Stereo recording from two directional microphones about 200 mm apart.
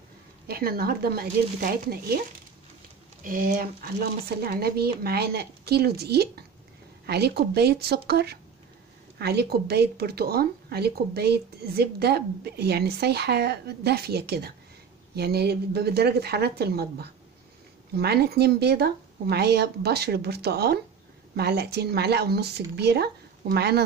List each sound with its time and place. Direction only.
0.5 s speech: 50° right (ahead or behind)
3.3 s speech: 45° right (ahead or behind)